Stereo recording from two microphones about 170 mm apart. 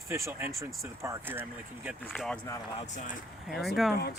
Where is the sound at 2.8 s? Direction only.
45° left (ahead or behind).